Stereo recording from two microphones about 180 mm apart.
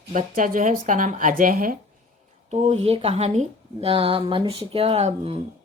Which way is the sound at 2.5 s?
35° right (ahead or behind).